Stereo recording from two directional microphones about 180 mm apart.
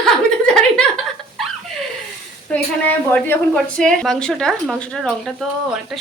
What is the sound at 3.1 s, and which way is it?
Speech, 10° left (ahead or behind).